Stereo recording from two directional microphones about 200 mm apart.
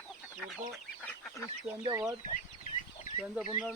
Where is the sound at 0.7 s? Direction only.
Centre (ahead or behind).